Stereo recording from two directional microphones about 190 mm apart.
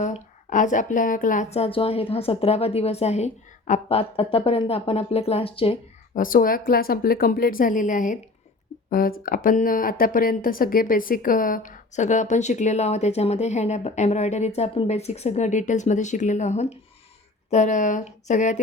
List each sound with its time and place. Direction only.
0.0 s speech: 40° left (ahead or behind)
6.1 s a woman's voice: 45° left (ahead or behind)